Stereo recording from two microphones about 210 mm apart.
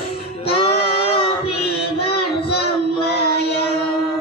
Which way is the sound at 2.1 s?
50° left (ahead or behind).